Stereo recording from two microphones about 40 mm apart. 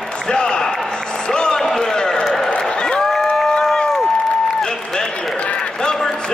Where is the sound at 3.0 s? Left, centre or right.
Centre.